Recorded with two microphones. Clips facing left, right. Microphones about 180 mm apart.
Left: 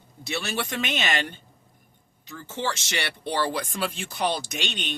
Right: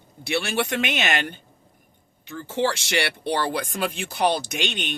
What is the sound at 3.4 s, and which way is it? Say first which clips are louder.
Speech: right 2 dB; 55° right (ahead or behind).